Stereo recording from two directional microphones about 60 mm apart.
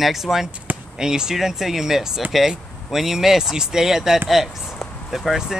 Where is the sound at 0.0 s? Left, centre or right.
Centre.